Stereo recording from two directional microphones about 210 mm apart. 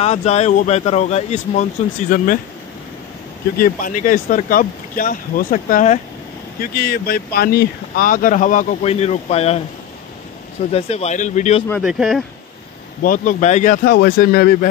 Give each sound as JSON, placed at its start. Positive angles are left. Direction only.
{"t": 0.0, "sound": "speech", "side_deg": 30}
{"t": 3.5, "sound": "speech", "side_deg": 40}
{"t": 10.7, "sound": "speech", "side_deg": 30}
{"t": 11.8, "sound": "speech", "side_deg": -5}
{"t": 13.0, "sound": "speech", "side_deg": 40}